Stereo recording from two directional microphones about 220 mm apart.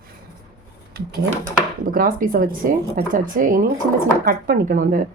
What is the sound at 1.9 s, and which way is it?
Speech, 40° right (ahead or behind).